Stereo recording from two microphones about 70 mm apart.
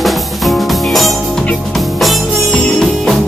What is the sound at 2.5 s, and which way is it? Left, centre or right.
Music, centre.